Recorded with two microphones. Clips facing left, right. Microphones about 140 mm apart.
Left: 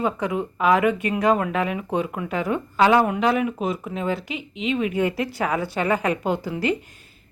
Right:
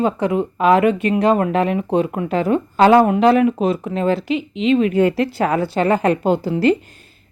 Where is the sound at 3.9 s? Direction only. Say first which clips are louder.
Right 8 dB; 90° right.